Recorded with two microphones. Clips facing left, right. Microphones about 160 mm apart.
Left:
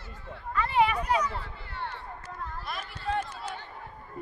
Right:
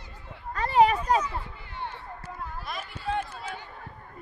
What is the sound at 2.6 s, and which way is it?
Speech, 5° right (ahead or behind).